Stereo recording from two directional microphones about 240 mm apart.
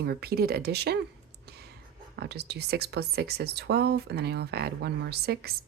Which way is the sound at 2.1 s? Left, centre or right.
Right.